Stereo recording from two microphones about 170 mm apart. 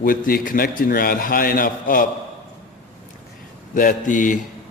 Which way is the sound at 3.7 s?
50° left (ahead or behind).